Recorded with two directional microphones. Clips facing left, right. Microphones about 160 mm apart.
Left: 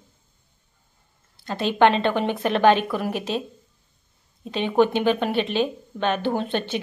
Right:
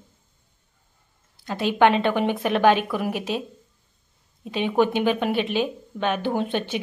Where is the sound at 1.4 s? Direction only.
10° right (ahead or behind).